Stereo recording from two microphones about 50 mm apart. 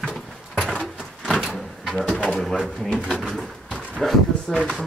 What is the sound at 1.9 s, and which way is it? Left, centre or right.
Pigeon, centre.